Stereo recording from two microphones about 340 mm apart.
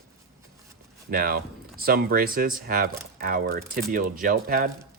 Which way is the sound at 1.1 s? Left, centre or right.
Right.